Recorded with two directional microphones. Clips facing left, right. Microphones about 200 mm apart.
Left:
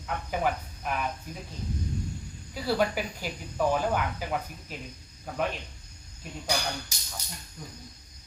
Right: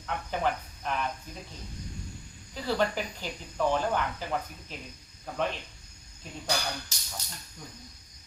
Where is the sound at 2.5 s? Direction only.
10° left (ahead or behind).